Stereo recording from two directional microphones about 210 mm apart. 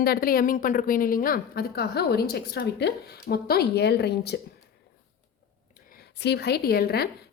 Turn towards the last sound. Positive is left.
turn(degrees=50)  # may be behind; listen again after turning